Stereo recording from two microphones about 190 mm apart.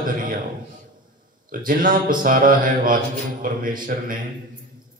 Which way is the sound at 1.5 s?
45° right (ahead or behind).